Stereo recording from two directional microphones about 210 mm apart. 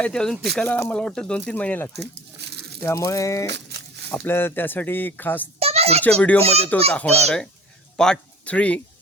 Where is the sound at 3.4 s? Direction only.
55° right (ahead or behind).